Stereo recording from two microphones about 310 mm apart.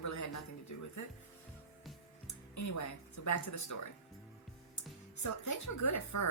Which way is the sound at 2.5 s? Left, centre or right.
Left.